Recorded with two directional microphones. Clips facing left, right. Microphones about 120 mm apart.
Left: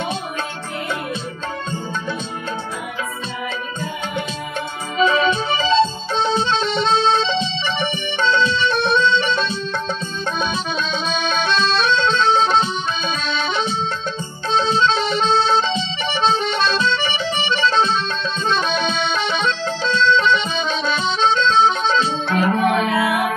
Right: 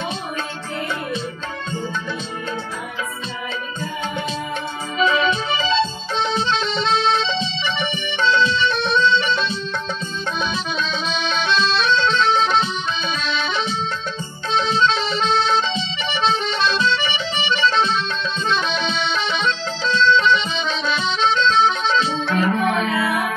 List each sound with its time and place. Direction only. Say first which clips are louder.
4.9 s music: left 2 dB; 40° left (ahead or behind)
10.4 s accordion: left 1 dB; 45° left (ahead or behind)
13.2 s accordion: left 2 dB; 50° left (ahead or behind)